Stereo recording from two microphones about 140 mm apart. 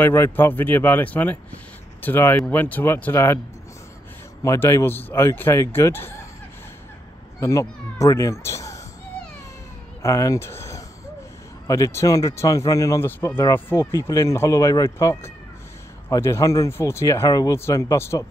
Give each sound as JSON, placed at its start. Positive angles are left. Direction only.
{"t": 0.0, "sound": "speech", "side_deg": 15}
{"t": 4.4, "sound": "speech", "side_deg": 20}
{"t": 7.3, "sound": "speech", "side_deg": 20}
{"t": 10.0, "sound": "speech", "side_deg": 20}